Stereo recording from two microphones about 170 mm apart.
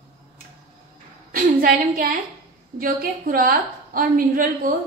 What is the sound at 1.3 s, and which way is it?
A woman's voice, 60° right (ahead or behind).